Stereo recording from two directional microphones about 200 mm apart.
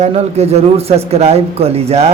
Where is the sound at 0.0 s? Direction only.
30° right (ahead or behind).